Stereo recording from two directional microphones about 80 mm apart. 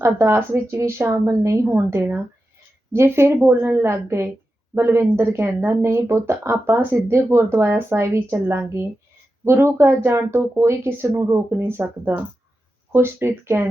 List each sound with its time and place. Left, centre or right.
0.0 s a woman's voice: right